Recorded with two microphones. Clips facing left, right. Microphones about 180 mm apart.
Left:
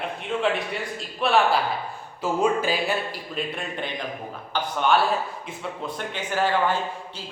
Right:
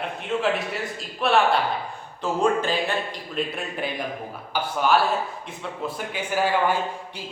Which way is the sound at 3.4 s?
5° right (ahead or behind).